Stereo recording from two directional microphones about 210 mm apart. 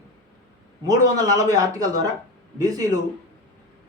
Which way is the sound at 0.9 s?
15° right (ahead or behind).